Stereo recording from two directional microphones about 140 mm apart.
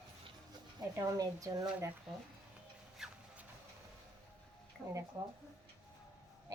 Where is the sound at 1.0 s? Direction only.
25° right (ahead or behind).